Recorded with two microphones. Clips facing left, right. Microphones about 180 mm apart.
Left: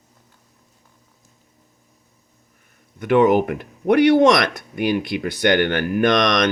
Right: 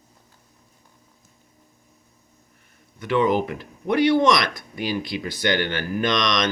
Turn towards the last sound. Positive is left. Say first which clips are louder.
# left 5 dB
turn(degrees=55)  # may be behind; listen again after turning